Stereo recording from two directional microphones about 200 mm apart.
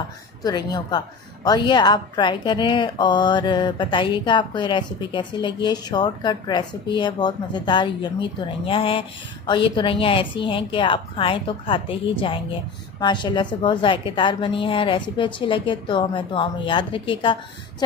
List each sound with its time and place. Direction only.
0.4 s a woman's voice: 20° left (ahead or behind)